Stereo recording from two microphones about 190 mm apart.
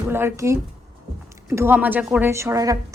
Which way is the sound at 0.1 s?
10° right (ahead or behind).